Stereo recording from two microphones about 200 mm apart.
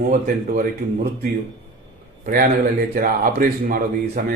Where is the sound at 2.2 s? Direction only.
45° right (ahead or behind).